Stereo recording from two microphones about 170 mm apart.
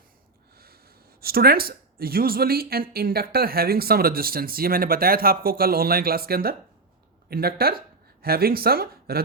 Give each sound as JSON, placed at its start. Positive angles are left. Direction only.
{"t": 0.5, "sound": "snort", "side_deg": -65}
{"t": 1.2, "sound": "speech", "side_deg": -65}